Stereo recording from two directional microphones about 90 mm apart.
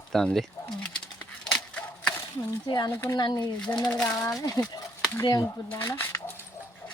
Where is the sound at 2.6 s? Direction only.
50° left (ahead or behind).